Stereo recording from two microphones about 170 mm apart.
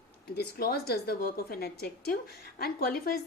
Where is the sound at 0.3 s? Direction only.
65° left (ahead or behind).